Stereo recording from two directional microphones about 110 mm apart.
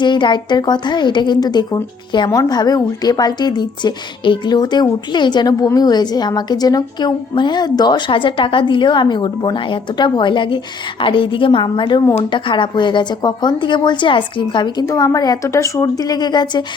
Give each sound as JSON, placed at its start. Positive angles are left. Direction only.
{"t": 0.0, "sound": "a woman's voice", "side_deg": 45}
{"t": 14.8, "sound": "a woman's voice", "side_deg": 35}